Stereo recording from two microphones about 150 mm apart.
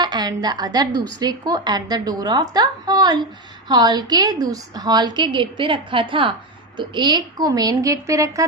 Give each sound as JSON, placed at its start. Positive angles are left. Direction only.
{"t": 0.0, "sound": "a woman's voice", "side_deg": -30}